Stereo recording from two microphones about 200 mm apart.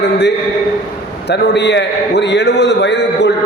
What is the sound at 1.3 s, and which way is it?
A man's voice, 60° left (ahead or behind).